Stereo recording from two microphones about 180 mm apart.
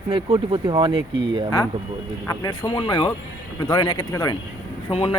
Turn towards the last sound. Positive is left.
turn(degrees=35)  # may be behind; listen again after turning